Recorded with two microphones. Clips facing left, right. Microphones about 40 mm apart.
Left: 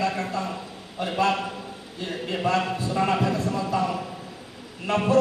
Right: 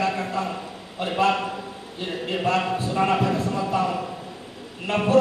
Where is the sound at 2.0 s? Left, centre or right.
Right.